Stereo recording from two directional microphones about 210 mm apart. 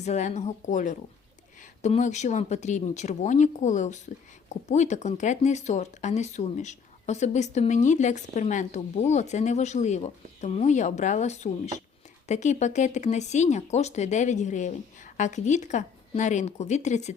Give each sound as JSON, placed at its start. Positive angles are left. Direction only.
{"t": 0.0, "sound": "speech", "side_deg": 35}